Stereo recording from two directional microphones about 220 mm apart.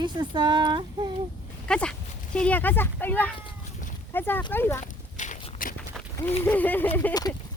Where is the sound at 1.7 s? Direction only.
5° left (ahead or behind).